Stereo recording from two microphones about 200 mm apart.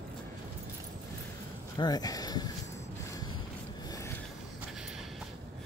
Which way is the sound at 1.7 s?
20° left (ahead or behind).